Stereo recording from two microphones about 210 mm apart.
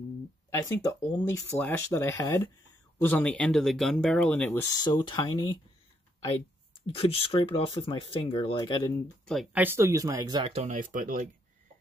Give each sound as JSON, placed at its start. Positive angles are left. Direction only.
{"t": 0.5, "sound": "speech", "side_deg": 15}
{"t": 4.7, "sound": "speech", "side_deg": 20}
{"t": 7.0, "sound": "speech", "side_deg": 25}
{"t": 9.2, "sound": "speech", "side_deg": 0}